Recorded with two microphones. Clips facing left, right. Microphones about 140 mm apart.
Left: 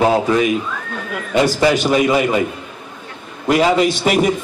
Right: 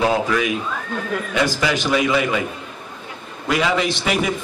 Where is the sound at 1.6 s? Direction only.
45° left (ahead or behind).